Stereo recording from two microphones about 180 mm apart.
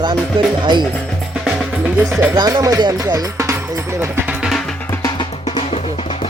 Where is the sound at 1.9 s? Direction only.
10° right (ahead or behind).